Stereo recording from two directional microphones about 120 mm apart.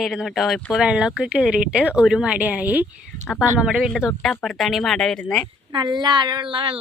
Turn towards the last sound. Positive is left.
turn(degrees=-50)  # may be behind; listen again after turning